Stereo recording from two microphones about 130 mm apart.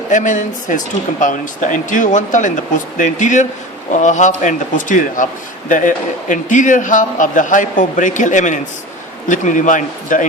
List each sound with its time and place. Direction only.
0.1 s a man's voice: 75° left (ahead or behind)
1.2 s a man's voice: 85° left